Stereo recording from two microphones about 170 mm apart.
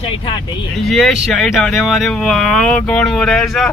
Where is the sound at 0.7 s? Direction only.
Centre (ahead or behind).